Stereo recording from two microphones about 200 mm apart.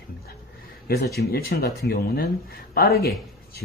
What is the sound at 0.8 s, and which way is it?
Speech, 50° left (ahead or behind).